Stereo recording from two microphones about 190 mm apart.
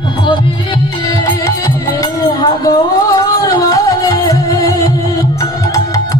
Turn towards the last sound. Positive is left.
turn(degrees=15)  # may be behind; listen again after turning